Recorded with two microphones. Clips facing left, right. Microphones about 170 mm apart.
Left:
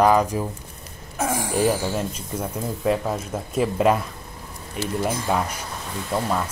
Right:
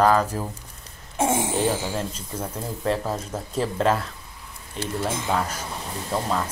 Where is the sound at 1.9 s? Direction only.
10° left (ahead or behind).